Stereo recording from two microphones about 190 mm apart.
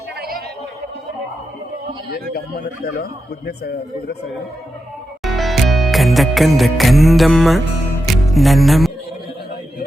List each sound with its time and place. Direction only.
0.2 s a sound: 50° right (ahead or behind)
3.0 s a man's voice: 55° left (ahead or behind)
5.2 s music: centre (ahead or behind)